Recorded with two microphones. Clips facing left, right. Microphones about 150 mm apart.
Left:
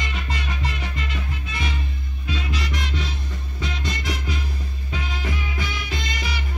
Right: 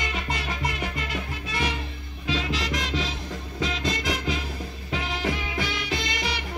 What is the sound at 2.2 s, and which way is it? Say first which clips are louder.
Music: right 2 dB; 90° right.